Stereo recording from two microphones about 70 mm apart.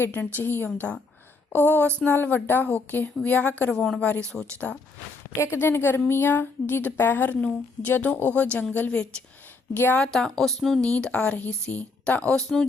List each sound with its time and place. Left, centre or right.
0.0 s a woman's voice: left
3.7 s speech: centre
5.4 s a woman's voice: left
10.0 s speech: centre
10.8 s a woman's voice: centre
12.4 s speech: centre